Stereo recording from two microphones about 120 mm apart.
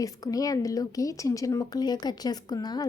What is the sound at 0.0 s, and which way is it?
Speech, 30° left (ahead or behind).